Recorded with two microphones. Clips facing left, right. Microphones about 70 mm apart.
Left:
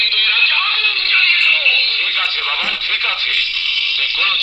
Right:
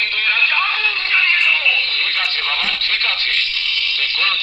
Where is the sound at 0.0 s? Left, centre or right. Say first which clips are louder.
Left 1 dB; centre.